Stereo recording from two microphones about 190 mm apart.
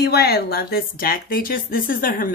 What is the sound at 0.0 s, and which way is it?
Speech, 60° left (ahead or behind).